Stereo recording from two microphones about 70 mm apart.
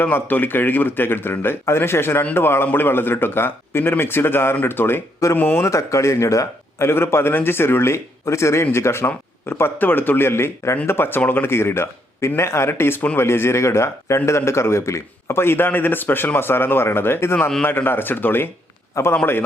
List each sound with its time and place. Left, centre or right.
0.0 s a man's voice: left
5.6 s a man's voice: left